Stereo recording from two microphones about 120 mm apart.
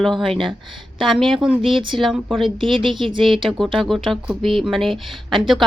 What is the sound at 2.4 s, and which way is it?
Speech, 45° right (ahead or behind).